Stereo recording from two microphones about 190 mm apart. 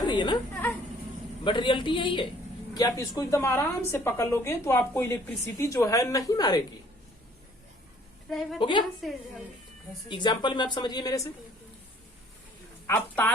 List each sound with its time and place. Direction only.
0.0 s a sound: 25° left (ahead or behind)
1.5 s a woman's voice: 25° left (ahead or behind)
8.3 s a woman's voice: centre (ahead or behind)
8.5 s a woman's voice: 25° left (ahead or behind)
9.0 s a woman's voice: centre (ahead or behind)
10.1 s a woman's voice: 25° left (ahead or behind)
12.9 s a woman's voice: 10° left (ahead or behind)